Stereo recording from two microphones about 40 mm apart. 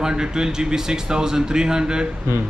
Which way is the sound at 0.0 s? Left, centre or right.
Centre.